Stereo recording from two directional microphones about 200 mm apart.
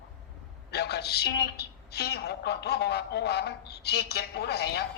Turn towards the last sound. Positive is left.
turn(degrees=55)  # may be behind; listen again after turning